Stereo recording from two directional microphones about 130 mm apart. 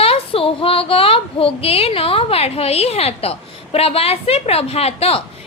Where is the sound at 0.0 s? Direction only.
45° left (ahead or behind).